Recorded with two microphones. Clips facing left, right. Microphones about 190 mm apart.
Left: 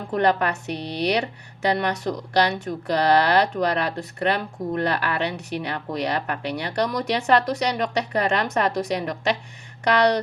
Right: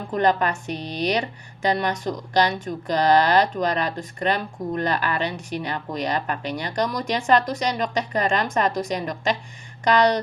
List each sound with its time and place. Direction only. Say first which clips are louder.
0.1 s a woman's voice: even; 65° left (ahead or behind)